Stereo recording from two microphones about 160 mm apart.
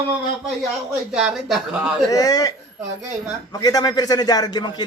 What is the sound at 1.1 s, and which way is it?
Speech, 5° right (ahead or behind).